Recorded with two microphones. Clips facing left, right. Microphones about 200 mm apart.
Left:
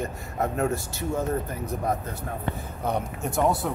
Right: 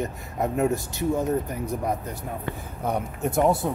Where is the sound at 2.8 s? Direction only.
10° right (ahead or behind).